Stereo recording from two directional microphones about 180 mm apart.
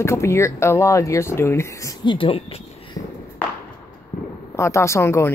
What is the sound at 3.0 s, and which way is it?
Walk, 40° left (ahead or behind).